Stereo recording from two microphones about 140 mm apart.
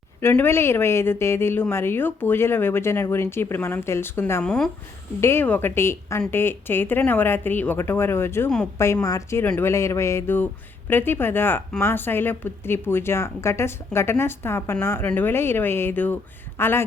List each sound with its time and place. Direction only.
0.2 s speech: 15° left (ahead or behind)
4.4 s speech: 5° left (ahead or behind)
5.2 s a woman's voice: 15° left (ahead or behind)